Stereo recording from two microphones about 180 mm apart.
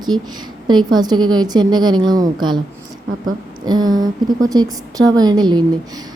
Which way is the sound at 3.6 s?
20° right (ahead or behind).